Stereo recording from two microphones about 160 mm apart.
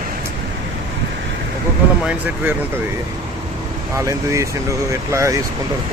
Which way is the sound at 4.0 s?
20° right (ahead or behind).